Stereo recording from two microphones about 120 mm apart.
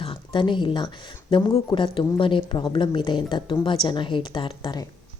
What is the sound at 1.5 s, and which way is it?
A woman's voice, 45° left (ahead or behind).